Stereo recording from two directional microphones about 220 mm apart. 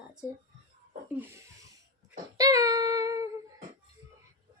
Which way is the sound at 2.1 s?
15° right (ahead or behind).